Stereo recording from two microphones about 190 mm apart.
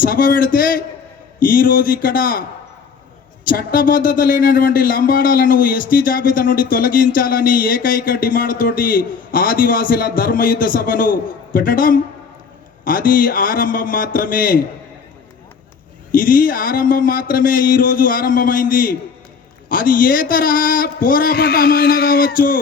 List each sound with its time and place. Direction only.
0.0 s speech: 50° left (ahead or behind)
3.4 s speech: 45° left (ahead or behind)
16.1 s speech: 45° left (ahead or behind)